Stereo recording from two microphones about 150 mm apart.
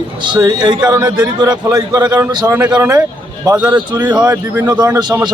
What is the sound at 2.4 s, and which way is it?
Speech, 5° right (ahead or behind).